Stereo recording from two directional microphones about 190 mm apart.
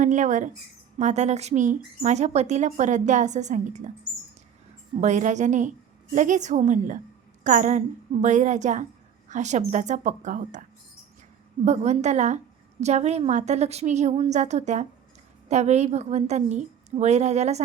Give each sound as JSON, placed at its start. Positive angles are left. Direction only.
{"t": 0.0, "sound": "speech", "side_deg": -40}
{"t": 4.9, "sound": "speech", "side_deg": -40}